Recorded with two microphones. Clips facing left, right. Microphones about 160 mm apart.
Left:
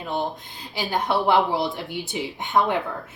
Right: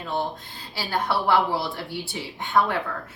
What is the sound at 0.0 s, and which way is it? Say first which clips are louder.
A woman's voice: left 1 dB; 20° left (ahead or behind).